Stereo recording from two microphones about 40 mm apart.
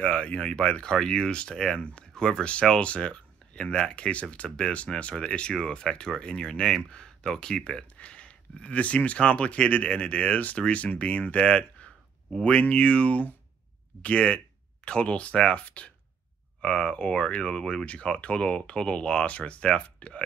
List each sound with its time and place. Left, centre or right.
0.0 s speech: left
0.8 s speech: centre
1.8 s speech: left
2.1 s speech: centre
2.8 s speech: left
8.0 s speech: left